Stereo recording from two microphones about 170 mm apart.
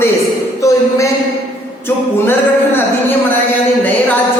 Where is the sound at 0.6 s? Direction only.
20° left (ahead or behind).